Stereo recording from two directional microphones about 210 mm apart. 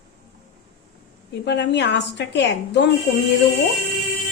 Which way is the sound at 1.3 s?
55° left (ahead or behind).